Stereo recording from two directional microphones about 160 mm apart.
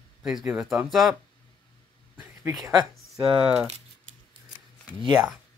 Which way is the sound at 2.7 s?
35° right (ahead or behind).